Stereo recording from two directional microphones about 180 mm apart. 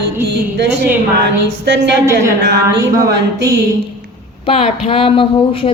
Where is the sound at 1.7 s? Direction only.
70° right (ahead or behind).